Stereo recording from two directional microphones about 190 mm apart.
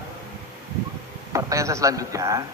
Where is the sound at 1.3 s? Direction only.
15° right (ahead or behind).